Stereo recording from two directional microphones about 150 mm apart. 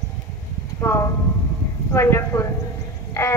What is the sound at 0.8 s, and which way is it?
A woman's voice, 15° left (ahead or behind).